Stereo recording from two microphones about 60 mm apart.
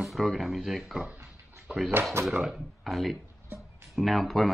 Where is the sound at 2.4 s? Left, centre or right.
Centre.